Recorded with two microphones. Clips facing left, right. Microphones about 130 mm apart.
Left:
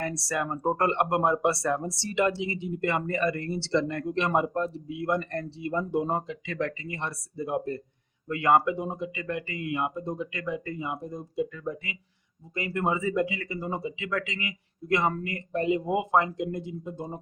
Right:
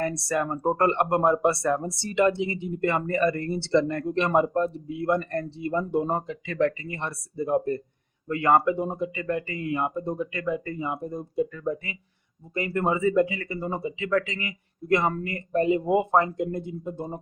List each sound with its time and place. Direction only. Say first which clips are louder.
0.0 s speech: right 4 dB; 50° right (ahead or behind)
14.1 s speech: right 8 dB; 40° right (ahead or behind)